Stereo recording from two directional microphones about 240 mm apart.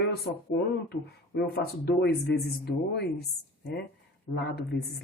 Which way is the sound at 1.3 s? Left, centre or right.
Left.